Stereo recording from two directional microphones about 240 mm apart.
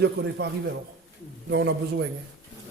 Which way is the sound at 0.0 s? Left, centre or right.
Right.